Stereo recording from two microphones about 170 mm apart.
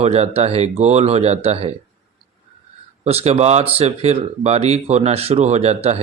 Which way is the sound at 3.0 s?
35° right (ahead or behind).